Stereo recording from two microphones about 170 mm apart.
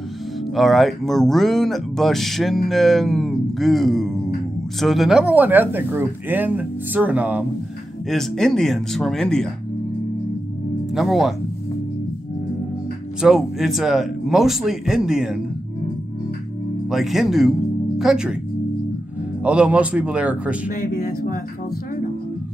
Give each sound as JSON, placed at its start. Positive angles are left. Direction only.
{"t": 0.6, "sound": "speech", "side_deg": 0}
{"t": 8.1, "sound": "speech", "side_deg": 0}
{"t": 10.9, "sound": "speech", "side_deg": 0}
{"t": 13.2, "sound": "speech", "side_deg": 0}
{"t": 16.9, "sound": "speech", "side_deg": 0}
{"t": 19.4, "sound": "speech", "side_deg": -5}
{"t": 20.6, "sound": "speech", "side_deg": 60}